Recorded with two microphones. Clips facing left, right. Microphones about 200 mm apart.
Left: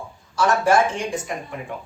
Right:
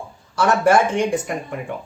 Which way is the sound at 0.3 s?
60° right (ahead or behind).